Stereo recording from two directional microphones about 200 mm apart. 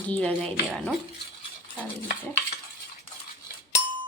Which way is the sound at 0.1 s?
5° left (ahead or behind).